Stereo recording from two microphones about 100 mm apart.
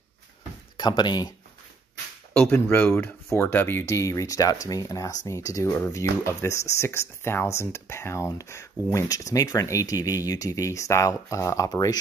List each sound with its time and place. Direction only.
0.7 s speech: 45° left (ahead or behind)
2.3 s speech: 20° left (ahead or behind); by 12.0 s 40° left (ahead or behind)